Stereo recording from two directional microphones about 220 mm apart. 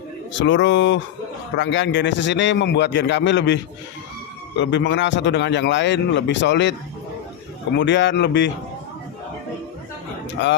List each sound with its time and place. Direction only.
0.3 s a man's voice: 55° left (ahead or behind)
4.6 s a man's voice: 55° left (ahead or behind)
7.8 s a man's voice: 55° left (ahead or behind)